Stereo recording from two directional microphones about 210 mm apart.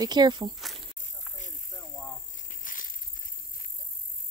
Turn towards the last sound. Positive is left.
turn(degrees=40)  # may be behind; listen again after turning